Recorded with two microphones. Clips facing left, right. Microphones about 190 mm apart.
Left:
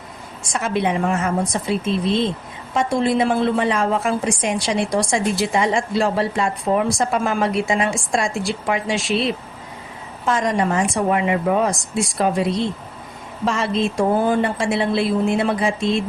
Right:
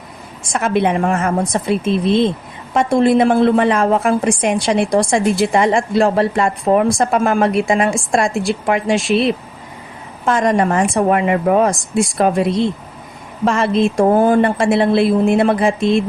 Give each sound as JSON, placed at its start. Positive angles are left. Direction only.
{"t": 0.5, "sound": "a woman's voice", "side_deg": -60}